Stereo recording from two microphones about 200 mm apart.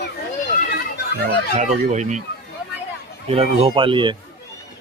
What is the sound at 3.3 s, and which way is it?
Speech, 30° right (ahead or behind).